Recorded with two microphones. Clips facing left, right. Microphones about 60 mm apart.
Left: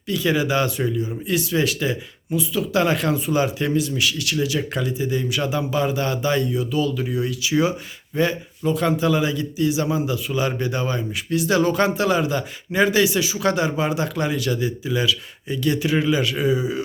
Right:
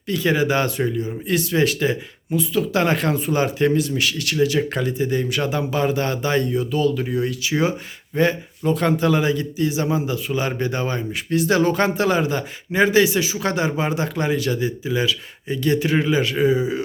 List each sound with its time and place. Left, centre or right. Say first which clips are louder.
0.1 s a man's voice: right 1 dB; right